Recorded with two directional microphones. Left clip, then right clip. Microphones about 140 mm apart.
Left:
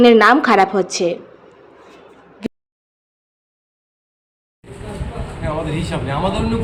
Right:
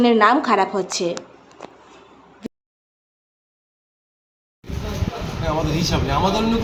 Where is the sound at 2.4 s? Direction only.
30° left (ahead or behind).